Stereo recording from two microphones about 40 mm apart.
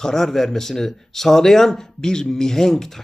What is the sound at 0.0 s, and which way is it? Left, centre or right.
Speech, centre.